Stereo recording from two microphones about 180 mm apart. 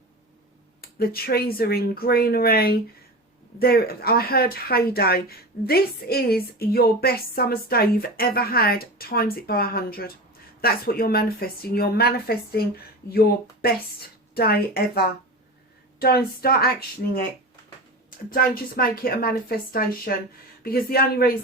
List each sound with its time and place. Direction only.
0.8 s speech: 55° left (ahead or behind)
18.3 s speech: 55° left (ahead or behind)